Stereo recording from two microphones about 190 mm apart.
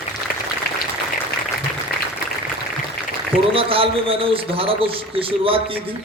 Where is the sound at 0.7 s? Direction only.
55° left (ahead or behind).